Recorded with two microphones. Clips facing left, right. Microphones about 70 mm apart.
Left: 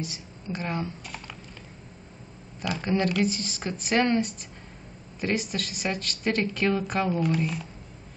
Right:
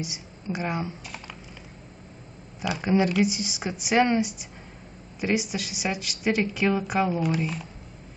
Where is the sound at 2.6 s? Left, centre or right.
Centre.